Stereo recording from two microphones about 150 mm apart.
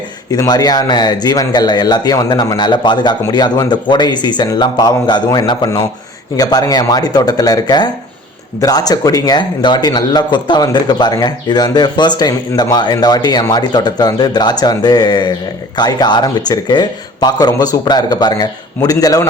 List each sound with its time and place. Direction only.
0.3 s speech: 25° left (ahead or behind)